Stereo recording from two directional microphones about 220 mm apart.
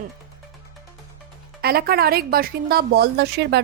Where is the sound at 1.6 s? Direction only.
45° right (ahead or behind).